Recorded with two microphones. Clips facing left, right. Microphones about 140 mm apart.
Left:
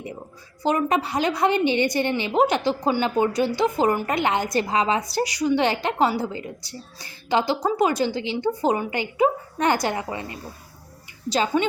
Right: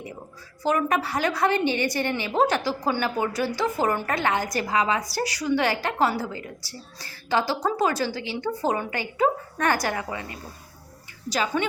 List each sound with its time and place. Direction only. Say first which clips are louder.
0.6 s a woman's voice: left 2 dB; 20° left (ahead or behind)